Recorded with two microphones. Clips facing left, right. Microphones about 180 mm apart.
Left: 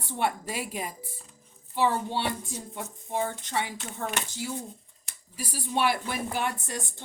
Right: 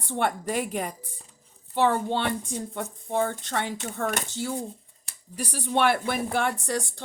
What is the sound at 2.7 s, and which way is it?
Speech, 60° right (ahead or behind).